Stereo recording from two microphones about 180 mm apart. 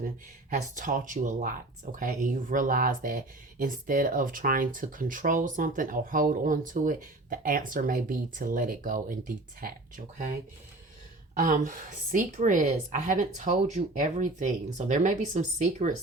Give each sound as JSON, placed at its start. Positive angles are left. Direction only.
{"t": 0.5, "sound": "speech", "side_deg": -45}
{"t": 11.3, "sound": "speech", "side_deg": -45}